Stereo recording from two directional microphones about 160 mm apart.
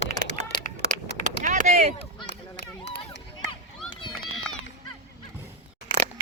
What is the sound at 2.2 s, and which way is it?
Run, 90° left.